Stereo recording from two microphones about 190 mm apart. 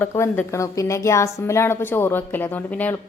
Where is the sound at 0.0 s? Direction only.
10° left (ahead or behind).